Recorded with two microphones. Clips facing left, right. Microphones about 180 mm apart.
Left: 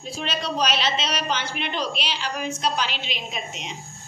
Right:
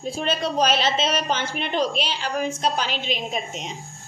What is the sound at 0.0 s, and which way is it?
A woman's voice, 50° right (ahead or behind).